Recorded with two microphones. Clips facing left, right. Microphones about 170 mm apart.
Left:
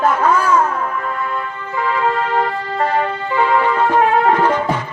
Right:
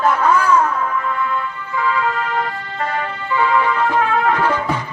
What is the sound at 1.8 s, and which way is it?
Music, 35° left (ahead or behind).